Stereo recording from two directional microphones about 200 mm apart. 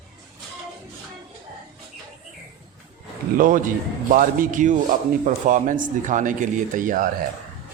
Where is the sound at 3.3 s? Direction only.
40° right (ahead or behind).